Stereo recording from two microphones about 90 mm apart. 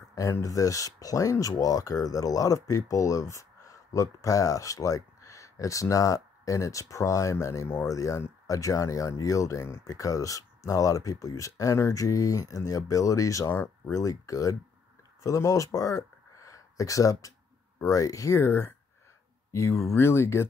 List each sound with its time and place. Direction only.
0.1 s speech: 40° left (ahead or behind)
13.9 s speech: 40° left (ahead or behind)